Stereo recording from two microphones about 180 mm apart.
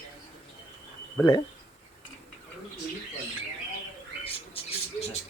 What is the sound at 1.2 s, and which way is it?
Speech, 15° left (ahead or behind).